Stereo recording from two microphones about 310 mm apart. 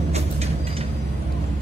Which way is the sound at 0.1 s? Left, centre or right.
Centre.